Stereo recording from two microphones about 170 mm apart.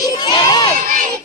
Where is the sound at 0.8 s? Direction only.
50° right (ahead or behind).